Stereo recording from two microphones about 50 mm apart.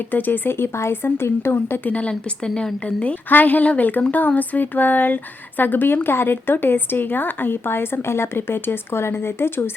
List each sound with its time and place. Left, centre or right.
0.1 s speech: left
0.8 s speech: left
1.8 s speech: left